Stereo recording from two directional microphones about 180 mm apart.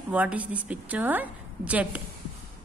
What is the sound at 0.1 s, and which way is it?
A woman's voice, 10° right (ahead or behind).